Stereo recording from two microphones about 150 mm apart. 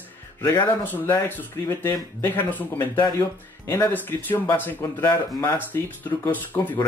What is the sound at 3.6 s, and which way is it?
Speech, 15° left (ahead or behind).